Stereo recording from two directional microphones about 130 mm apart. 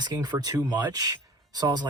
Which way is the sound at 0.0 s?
30° right (ahead or behind).